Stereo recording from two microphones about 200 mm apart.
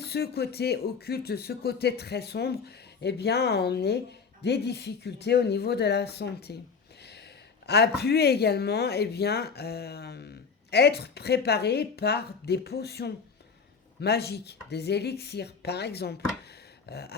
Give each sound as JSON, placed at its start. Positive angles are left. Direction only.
{"t": 0.0, "sound": "speech", "side_deg": 55}